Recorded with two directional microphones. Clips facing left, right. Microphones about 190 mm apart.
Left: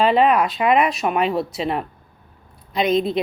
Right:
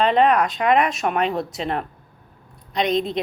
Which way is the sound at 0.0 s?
5° left (ahead or behind).